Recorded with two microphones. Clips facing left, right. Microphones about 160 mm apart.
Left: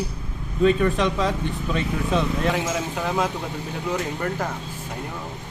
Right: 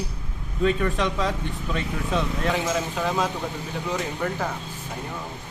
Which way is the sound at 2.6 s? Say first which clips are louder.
Even; 5° left (ahead or behind).